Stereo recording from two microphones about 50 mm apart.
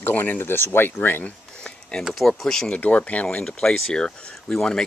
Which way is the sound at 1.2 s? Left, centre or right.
Left.